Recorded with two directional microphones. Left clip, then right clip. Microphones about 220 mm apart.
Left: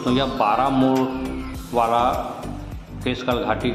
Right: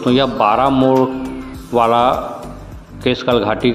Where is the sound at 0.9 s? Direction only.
Centre (ahead or behind).